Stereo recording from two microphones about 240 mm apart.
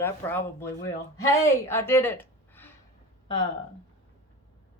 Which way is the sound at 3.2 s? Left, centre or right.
Left.